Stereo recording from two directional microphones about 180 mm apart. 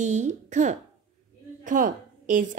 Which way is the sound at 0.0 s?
40° right (ahead or behind).